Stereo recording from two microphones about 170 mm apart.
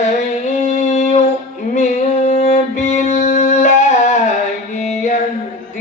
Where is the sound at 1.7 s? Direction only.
45° left (ahead or behind).